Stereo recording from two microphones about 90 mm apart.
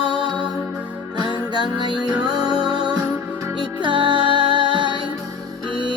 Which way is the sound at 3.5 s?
60° right (ahead or behind).